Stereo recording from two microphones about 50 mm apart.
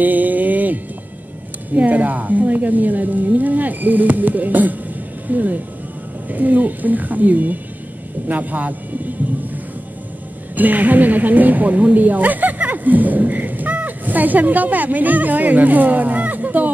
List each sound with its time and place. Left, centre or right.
0.0 s music: right
1.7 s speech: right
10.5 s a woman's voice: right